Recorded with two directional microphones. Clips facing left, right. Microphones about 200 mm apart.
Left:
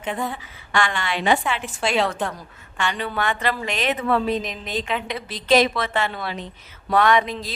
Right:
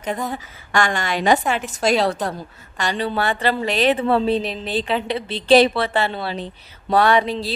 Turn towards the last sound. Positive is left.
turn(degrees=-35)  # may be behind; listen again after turning